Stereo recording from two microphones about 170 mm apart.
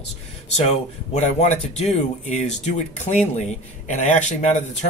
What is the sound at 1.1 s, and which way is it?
Speech, 40° left (ahead or behind).